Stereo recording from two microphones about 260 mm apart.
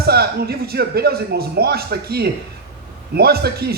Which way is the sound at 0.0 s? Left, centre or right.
Right.